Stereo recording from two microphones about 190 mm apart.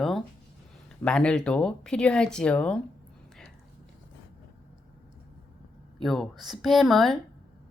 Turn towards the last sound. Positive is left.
turn(degrees=0)  # may be behind; listen again after turning